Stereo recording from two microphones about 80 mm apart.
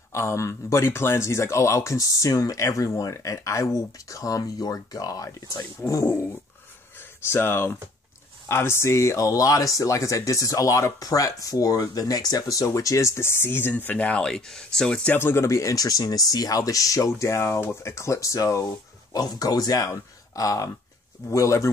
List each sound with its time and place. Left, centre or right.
0.1 s speech: left
5.8 s speech: left; by 14.2 s centre
14.2 s speech: centre
15.1 s speech: left
19.1 s speech: left